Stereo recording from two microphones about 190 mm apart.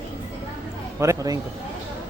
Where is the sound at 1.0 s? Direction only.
15° right (ahead or behind).